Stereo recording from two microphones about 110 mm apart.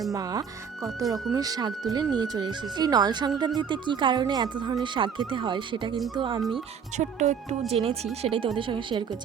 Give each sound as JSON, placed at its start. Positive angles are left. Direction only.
{"t": 0.1, "sound": "speech", "side_deg": -35}
{"t": 6.9, "sound": "speech", "side_deg": -90}
{"t": 7.7, "sound": "speech", "side_deg": -65}